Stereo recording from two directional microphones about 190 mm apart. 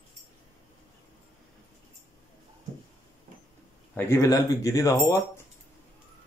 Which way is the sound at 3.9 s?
10° left (ahead or behind).